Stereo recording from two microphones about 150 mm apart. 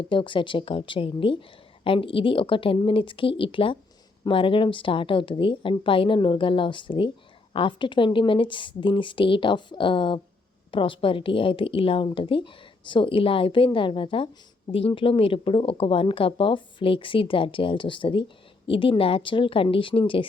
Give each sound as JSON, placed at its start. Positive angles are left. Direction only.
{"t": 0.0, "sound": "a woman's voice", "side_deg": 35}